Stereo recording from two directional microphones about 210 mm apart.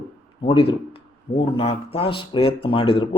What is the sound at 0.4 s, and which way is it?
A man's voice, 25° left (ahead or behind).